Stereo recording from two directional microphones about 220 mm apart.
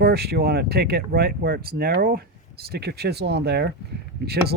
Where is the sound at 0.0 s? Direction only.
45° right (ahead or behind).